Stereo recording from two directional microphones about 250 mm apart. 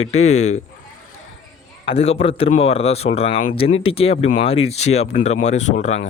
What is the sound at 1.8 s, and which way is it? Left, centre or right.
Speech, left.